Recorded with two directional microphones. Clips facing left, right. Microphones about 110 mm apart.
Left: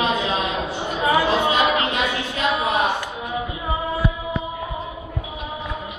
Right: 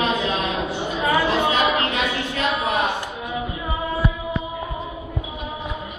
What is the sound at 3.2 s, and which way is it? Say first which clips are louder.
Music: even; 15° left (ahead or behind).